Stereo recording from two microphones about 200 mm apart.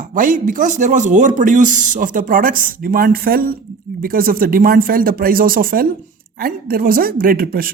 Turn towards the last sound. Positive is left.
turn(degrees=-45)  # may be behind; listen again after turning